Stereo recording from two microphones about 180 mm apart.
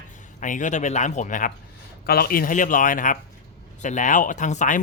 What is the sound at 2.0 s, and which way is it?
Speech, 60° left (ahead or behind).